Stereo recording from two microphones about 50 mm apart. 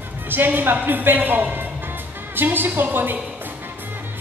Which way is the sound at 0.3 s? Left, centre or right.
Right.